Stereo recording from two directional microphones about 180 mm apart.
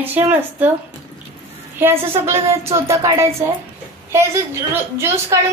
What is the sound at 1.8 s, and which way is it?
Speech, 10° right (ahead or behind).